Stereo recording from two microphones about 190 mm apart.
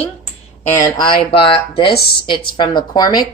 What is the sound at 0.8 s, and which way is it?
A woman's voice, 25° left (ahead or behind).